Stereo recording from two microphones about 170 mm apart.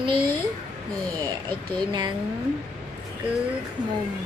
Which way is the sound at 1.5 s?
25° right (ahead or behind).